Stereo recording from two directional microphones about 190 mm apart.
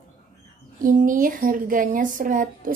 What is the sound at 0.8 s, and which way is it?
Speech, 45° right (ahead or behind).